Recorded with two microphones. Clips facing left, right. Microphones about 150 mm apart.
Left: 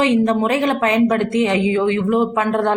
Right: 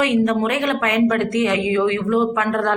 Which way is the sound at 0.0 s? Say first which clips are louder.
Left 2 dB; 30° left (ahead or behind).